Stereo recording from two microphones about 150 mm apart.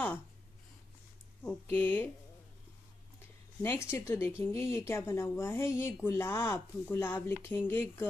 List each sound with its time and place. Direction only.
1.4 s speech: 10° left (ahead or behind)
3.2 s speech: 20° left (ahead or behind)